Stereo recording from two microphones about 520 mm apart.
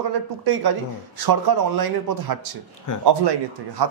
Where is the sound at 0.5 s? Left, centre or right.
Right.